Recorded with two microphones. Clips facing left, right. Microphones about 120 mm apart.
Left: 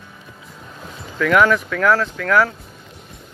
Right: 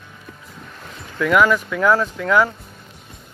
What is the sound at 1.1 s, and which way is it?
Speech, 5° right (ahead or behind).